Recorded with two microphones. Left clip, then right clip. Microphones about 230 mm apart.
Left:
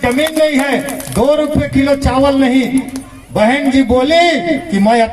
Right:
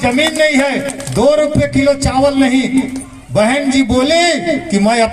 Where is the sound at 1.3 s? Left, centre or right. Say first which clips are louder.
Right 2 dB; right.